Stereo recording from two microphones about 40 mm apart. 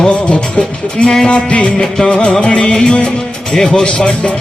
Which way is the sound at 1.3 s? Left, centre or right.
Left.